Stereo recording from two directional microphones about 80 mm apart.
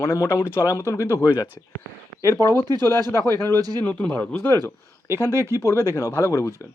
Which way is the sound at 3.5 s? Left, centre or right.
Right.